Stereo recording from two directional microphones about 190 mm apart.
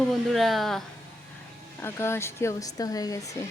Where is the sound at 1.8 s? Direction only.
15° left (ahead or behind).